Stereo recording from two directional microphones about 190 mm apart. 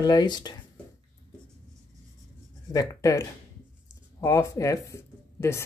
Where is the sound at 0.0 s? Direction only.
20° left (ahead or behind).